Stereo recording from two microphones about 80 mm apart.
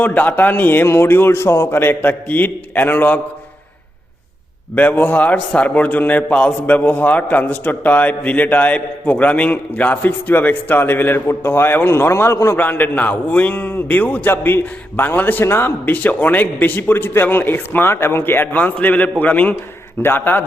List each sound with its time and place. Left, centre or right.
0.0 s a man's voice: left
1.8 s a man's voice: left
4.7 s a man's voice: centre; by 12.5 s left
12.5 s a man's voice: left